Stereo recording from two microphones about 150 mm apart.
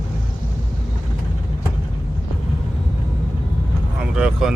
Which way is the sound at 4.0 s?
5° right (ahead or behind).